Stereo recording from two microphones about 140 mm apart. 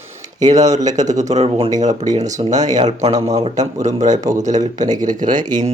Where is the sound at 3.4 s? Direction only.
60° right (ahead or behind).